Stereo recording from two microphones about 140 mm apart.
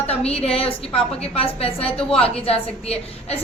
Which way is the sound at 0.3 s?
45° left (ahead or behind).